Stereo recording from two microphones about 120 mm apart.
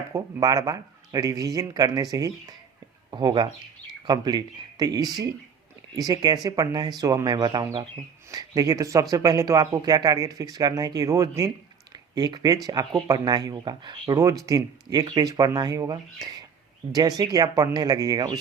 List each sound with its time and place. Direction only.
0.1 s speech: 30° right (ahead or behind)
14.2 s speech: 30° right (ahead or behind)